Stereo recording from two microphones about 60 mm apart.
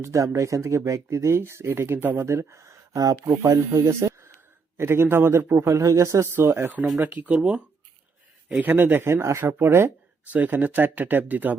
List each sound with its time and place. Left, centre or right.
0.0 s a man's voice: right
3.2 s speech: right
4.8 s a man's voice: right
6.3 s speech: right
7.0 s speech: right
7.3 s speech: centre
8.6 s speech: right
9.4 s speech: right
10.2 s speech: right